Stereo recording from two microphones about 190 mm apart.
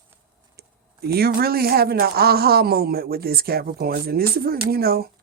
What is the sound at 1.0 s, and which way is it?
Speech, 55° right (ahead or behind).